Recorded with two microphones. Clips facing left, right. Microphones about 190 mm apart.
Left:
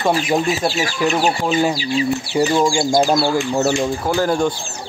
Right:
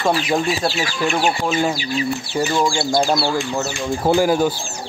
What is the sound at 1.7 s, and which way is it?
Speech, 30° left (ahead or behind).